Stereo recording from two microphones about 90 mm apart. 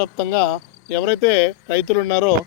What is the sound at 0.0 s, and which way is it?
Speech, 25° left (ahead or behind).